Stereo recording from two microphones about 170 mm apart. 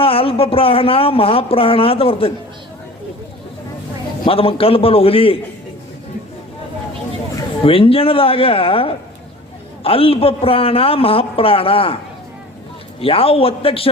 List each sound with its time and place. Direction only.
0.0 s speech: 35° left (ahead or behind)
4.3 s speech: 35° left (ahead or behind)
7.6 s speech: 35° left (ahead or behind)
13.0 s speech: 35° left (ahead or behind)